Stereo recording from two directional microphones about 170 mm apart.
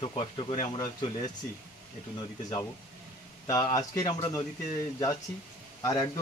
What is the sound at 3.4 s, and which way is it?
Speech, 20° left (ahead or behind).